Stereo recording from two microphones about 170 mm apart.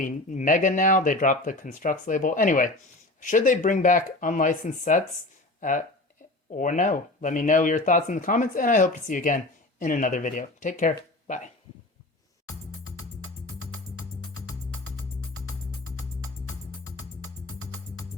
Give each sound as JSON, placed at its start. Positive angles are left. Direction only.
{"t": 0.0, "sound": "speech", "side_deg": 50}